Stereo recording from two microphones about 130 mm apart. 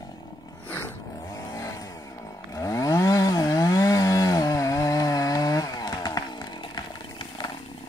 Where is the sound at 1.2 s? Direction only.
25° left (ahead or behind).